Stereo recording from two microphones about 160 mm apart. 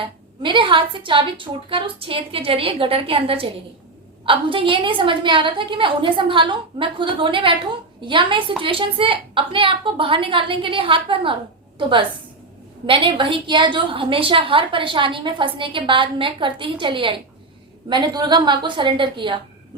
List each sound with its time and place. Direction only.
0.0 s a woman's voice: 30° right (ahead or behind)